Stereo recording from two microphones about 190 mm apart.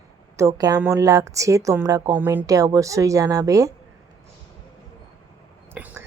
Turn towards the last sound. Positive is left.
turn(degrees=-10)  # may be behind; listen again after turning